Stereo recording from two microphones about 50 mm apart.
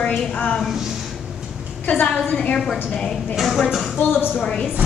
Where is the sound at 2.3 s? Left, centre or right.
Left.